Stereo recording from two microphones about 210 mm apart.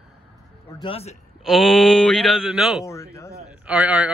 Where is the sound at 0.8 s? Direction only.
25° left (ahead or behind).